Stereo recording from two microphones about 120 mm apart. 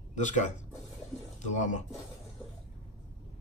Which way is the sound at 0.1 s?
90° left.